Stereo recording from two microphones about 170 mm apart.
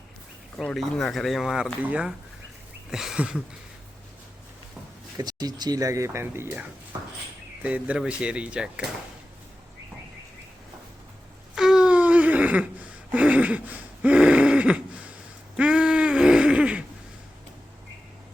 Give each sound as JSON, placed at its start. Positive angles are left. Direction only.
{"t": 0.5, "sound": "speech", "side_deg": 5}
{"t": 5.1, "sound": "speech", "side_deg": -25}
{"t": 11.5, "sound": "a sound", "side_deg": -5}